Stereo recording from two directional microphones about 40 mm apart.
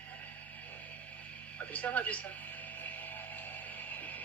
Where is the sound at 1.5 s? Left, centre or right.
Left.